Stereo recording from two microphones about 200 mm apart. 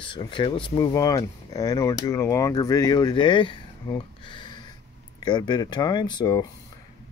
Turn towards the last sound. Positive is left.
turn(degrees=20)  # may be behind; listen again after turning